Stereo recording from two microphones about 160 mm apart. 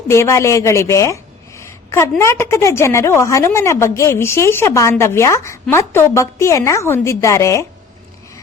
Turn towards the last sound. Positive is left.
turn(degrees=20)  # may be behind; listen again after turning